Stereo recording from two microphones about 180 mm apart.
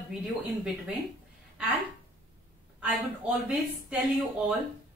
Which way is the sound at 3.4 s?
5° right (ahead or behind).